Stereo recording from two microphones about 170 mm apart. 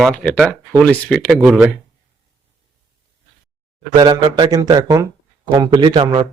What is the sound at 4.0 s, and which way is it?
Speech, 30° right (ahead or behind).